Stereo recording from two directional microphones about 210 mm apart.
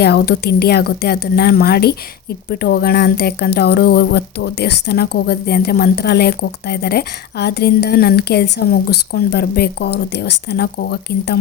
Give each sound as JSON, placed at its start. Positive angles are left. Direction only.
{"t": 0.0, "sound": "speech", "side_deg": 50}